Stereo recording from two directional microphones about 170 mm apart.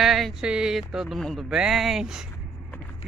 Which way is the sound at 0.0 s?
Centre (ahead or behind).